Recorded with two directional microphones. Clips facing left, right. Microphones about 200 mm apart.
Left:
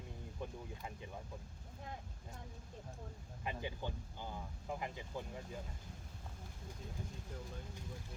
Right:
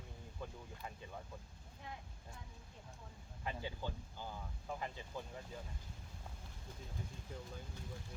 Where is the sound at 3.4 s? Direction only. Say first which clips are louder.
Left 1 dB; 15° left (ahead or behind).